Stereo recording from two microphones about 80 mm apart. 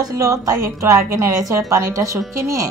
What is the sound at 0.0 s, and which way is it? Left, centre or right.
A woman's voice, right.